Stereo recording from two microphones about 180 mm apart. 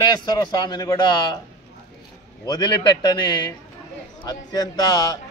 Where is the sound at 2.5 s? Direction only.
25° left (ahead or behind).